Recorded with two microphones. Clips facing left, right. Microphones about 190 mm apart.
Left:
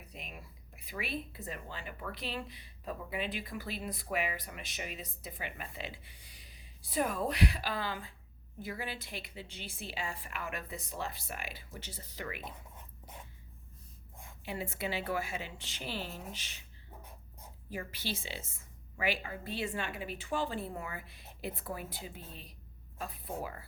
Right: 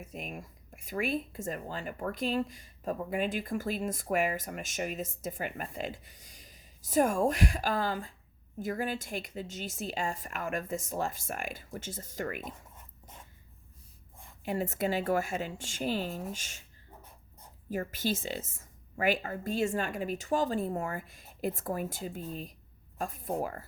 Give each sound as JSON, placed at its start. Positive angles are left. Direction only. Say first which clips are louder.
{"t": 0.0, "sound": "speech", "louder": "right 8 dB", "side_deg": -45}
{"t": 14.4, "sound": "speech", "louder": "right 7 dB", "side_deg": -45}
{"t": 17.7, "sound": "speech", "louder": "right 8 dB", "side_deg": -45}